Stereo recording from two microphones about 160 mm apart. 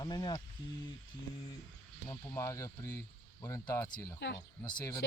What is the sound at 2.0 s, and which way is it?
Speech, 20° left (ahead or behind).